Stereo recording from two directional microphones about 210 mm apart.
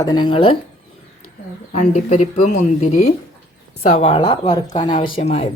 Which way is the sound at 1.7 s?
35° left (ahead or behind).